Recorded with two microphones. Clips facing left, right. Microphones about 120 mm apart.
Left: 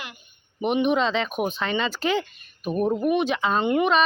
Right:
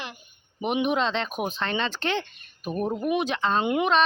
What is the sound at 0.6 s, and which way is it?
Speech, centre (ahead or behind).